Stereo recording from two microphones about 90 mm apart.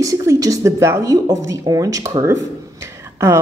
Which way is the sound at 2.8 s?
30° right (ahead or behind).